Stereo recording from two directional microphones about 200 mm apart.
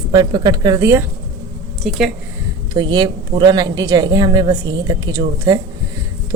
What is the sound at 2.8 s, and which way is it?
Speech, 20° right (ahead or behind).